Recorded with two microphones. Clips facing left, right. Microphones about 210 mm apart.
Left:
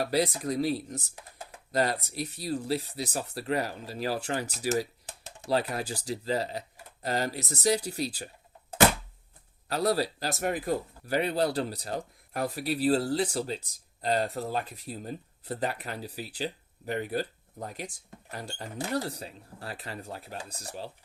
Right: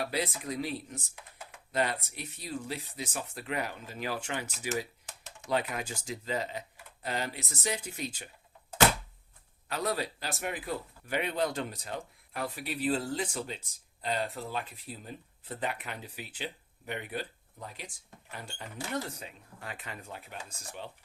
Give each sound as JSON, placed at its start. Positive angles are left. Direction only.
{"t": 0.0, "sound": "speech", "side_deg": 40}
{"t": 9.6, "sound": "speech", "side_deg": 35}